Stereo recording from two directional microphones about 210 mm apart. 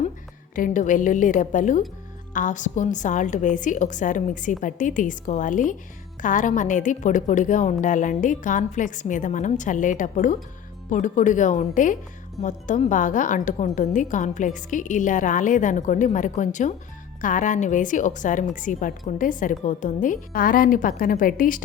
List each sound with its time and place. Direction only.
0.5 s a woman's voice: 40° left (ahead or behind)